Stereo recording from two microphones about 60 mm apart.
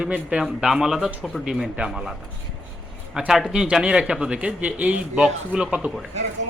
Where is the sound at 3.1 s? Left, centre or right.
Centre.